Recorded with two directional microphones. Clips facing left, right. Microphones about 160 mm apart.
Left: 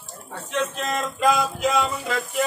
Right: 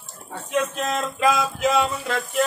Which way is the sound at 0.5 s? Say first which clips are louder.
Right 2 dB; 10° right (ahead or behind).